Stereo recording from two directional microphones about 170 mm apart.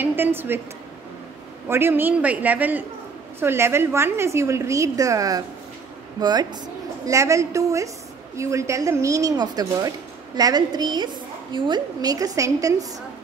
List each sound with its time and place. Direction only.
0.0 s a woman's voice: 10° right (ahead or behind)
1.7 s a woman's voice: 15° right (ahead or behind)